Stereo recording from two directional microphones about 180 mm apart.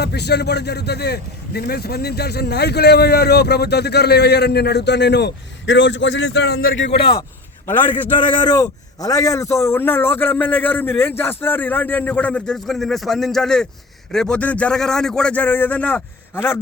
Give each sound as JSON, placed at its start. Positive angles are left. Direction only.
{"t": 0.0, "sound": "speech", "side_deg": 65}
{"t": 7.0, "sound": "a man's voice", "side_deg": 25}
{"t": 7.7, "sound": "a man's voice", "side_deg": 10}
{"t": 8.2, "sound": "a man's voice", "side_deg": 25}